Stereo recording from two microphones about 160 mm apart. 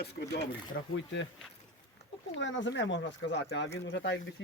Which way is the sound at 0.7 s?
90° left.